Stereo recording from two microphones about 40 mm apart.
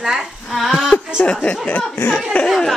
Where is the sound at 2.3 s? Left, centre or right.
Left.